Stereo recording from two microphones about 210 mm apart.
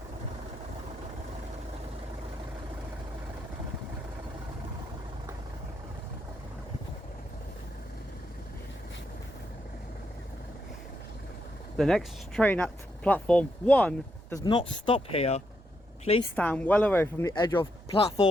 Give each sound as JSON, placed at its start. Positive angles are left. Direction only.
{"t": 11.8, "sound": "speech", "side_deg": 0}
{"t": 14.4, "sound": "speech", "side_deg": 25}
{"t": 16.3, "sound": "speech", "side_deg": 5}